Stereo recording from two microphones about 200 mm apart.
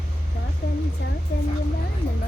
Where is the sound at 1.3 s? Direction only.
55° left (ahead or behind).